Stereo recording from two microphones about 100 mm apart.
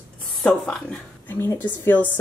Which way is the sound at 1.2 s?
20° left (ahead or behind).